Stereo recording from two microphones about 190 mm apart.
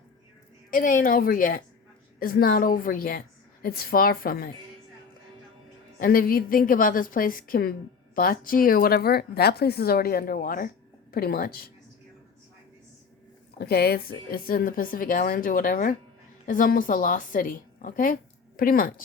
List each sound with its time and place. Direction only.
0.7 s a woman's voice: 45° left (ahead or behind)
6.0 s a woman's voice: 50° left (ahead or behind)
13.6 s a woman's voice: 55° left (ahead or behind)